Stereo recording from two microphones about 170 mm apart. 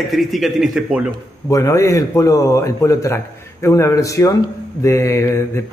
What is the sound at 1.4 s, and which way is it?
A man's voice, 20° left (ahead or behind).